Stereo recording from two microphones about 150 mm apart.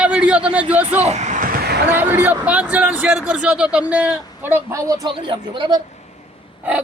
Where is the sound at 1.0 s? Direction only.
50° right (ahead or behind); by 1.8 s 85° right.